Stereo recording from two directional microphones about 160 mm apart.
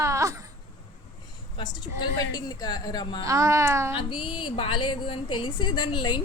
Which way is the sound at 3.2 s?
20° right (ahead or behind).